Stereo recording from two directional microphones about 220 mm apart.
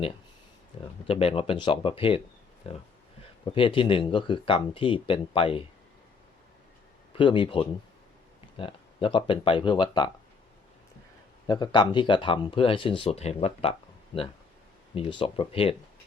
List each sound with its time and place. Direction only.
1.0 s speech: 25° left (ahead or behind)
7.1 s speech: 20° left (ahead or behind)
11.4 s speech: 20° left (ahead or behind)
14.9 s speech: 25° left (ahead or behind)